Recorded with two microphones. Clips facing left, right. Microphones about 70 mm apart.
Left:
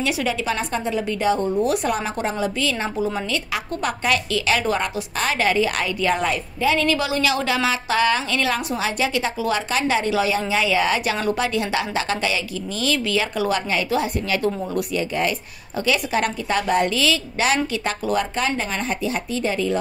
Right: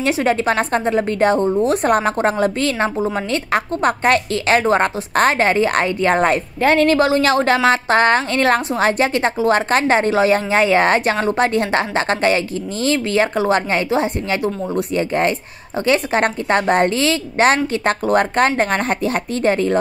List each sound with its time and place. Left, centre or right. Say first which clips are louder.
0.0 s a woman's voice: right 6 dB; right
1.4 s a woman's voice: right 4 dB; right
1.9 s a woman's voice: right 7 dB; right